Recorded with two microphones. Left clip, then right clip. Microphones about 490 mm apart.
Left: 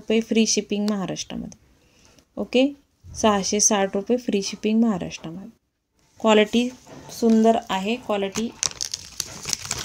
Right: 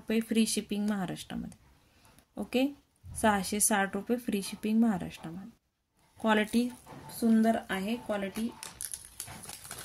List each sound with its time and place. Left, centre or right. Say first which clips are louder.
0.1 s speech: left 10 dB; right
9.1 s crumpling: left 17 dB; right